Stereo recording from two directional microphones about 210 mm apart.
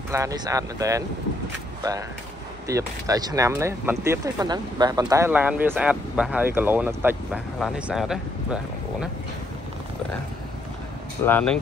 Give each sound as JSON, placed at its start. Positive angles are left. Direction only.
{"t": 0.1, "sound": "speech", "side_deg": -15}
{"t": 11.2, "sound": "speech", "side_deg": 5}